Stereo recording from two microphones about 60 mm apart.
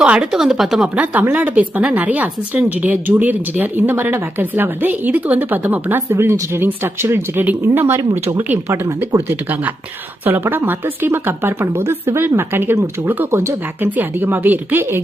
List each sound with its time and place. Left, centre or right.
0.0 s speech: centre
0.9 s speech: right
13.8 s speech: right